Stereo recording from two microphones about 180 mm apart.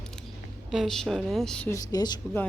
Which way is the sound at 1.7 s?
20° left (ahead or behind).